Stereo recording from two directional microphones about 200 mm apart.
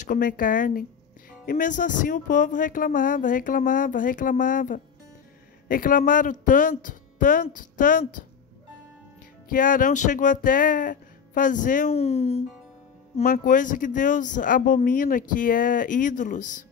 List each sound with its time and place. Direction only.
0.0 s speech: 40° left (ahead or behind)
9.5 s speech: 40° left (ahead or behind)
13.2 s speech: 45° left (ahead or behind)